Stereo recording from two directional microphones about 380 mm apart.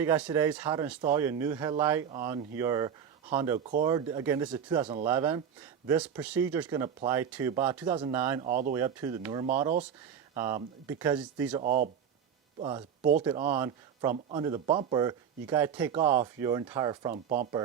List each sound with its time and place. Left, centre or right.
0.0 s speech: centre
8.4 s speech: right
8.7 s speech: centre
11.6 s speech: right